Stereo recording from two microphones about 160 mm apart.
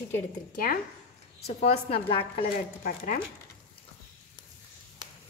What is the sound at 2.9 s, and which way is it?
Speech, 60° left (ahead or behind).